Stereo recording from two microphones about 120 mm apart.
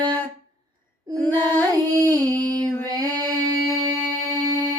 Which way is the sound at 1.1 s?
30° right (ahead or behind).